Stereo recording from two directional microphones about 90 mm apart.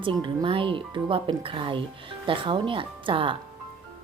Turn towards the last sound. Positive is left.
turn(degrees=-75)  # may be behind; listen again after turning